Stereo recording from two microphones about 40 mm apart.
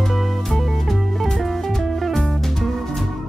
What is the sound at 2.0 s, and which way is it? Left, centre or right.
Music, centre.